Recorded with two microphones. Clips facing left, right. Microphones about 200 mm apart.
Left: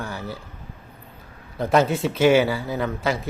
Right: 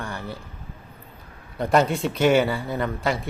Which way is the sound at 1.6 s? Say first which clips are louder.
Left 1 dB; centre (ahead or behind).